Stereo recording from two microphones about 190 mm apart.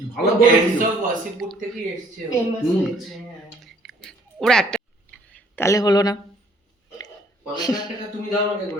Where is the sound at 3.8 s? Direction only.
5° left (ahead or behind).